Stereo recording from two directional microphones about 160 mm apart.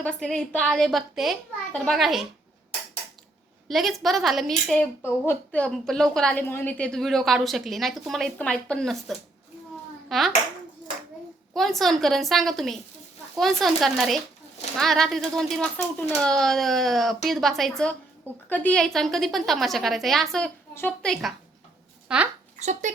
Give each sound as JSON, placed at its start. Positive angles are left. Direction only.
{"t": 0.0, "sound": "a woman's voice", "side_deg": 5}
{"t": 3.7, "sound": "a woman's voice", "side_deg": 0}
{"t": 10.1, "sound": "dishes", "side_deg": 0}
{"t": 11.5, "sound": "a woman's voice", "side_deg": 0}
{"t": 22.6, "sound": "speech", "side_deg": -50}